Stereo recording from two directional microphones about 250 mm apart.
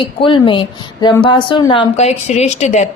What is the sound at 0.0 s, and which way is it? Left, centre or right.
Speech, centre.